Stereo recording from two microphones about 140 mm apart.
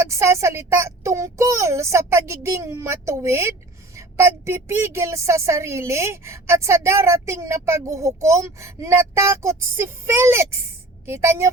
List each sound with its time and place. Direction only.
0.0 s a woman's voice: 20° right (ahead or behind)